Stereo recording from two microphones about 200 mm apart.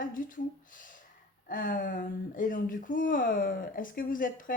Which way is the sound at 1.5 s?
45° left (ahead or behind).